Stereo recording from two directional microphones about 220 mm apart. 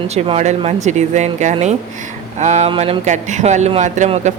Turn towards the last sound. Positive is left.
turn(degrees=-30)  # may be behind; listen again after turning